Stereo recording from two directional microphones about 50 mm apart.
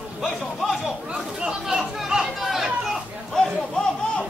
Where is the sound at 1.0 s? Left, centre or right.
Centre.